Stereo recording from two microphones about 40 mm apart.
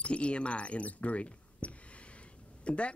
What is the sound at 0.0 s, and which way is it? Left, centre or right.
Speech, left.